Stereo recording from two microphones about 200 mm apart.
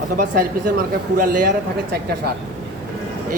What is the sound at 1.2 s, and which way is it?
Speech, 45° right (ahead or behind).